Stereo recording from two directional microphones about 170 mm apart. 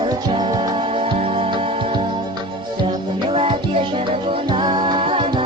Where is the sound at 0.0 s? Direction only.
25° right (ahead or behind).